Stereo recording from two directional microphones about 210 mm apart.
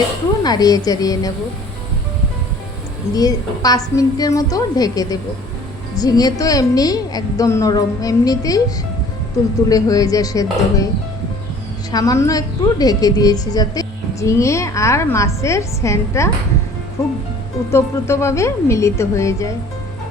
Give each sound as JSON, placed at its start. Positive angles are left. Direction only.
{"t": 0.4, "sound": "a woman's voice", "side_deg": 20}
{"t": 3.1, "sound": "a woman's voice", "side_deg": 15}
{"t": 9.6, "sound": "a woman's voice", "side_deg": 15}
{"t": 11.9, "sound": "a woman's voice", "side_deg": 15}